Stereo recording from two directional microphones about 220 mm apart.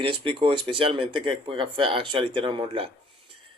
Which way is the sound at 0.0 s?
25° right (ahead or behind).